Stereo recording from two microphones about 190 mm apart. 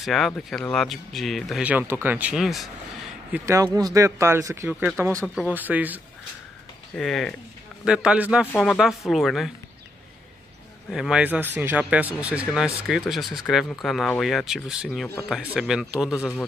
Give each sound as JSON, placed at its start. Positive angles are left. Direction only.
{"t": 0.0, "sound": "speech", "side_deg": 0}
{"t": 3.3, "sound": "speech", "side_deg": -10}
{"t": 7.0, "sound": "speech", "side_deg": 0}
{"t": 10.9, "sound": "speech", "side_deg": -5}